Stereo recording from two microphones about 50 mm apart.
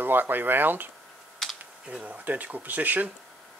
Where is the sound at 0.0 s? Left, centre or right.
Right.